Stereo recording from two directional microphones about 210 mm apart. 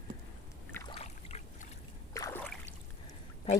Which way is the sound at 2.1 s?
10° left (ahead or behind).